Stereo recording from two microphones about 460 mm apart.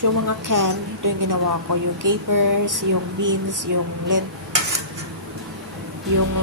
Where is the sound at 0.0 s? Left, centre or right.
Right.